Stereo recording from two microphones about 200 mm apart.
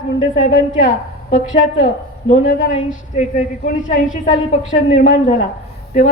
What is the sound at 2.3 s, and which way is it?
Speech, 40° left (ahead or behind).